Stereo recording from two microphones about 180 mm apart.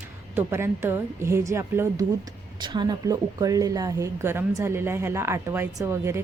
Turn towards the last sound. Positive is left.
turn(degrees=-15)  # may be behind; listen again after turning